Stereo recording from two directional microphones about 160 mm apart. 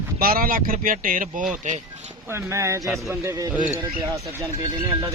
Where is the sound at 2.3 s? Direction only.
15° right (ahead or behind).